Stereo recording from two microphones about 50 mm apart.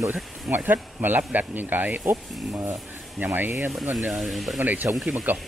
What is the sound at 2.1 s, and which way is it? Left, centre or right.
Speech, right.